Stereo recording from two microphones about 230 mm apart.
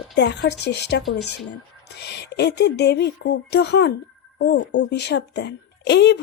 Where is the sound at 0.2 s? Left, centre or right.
Left.